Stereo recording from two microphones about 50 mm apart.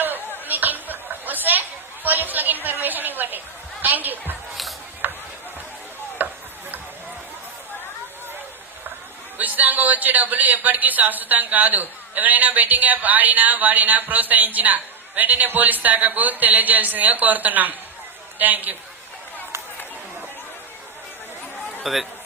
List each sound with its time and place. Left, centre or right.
0.0 s chatter: right
5.0 s run: right
6.1 s a sound: right
9.4 s a woman's voice: right
21.9 s speech: centre